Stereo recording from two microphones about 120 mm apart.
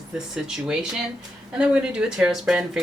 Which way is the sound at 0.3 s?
5° right (ahead or behind).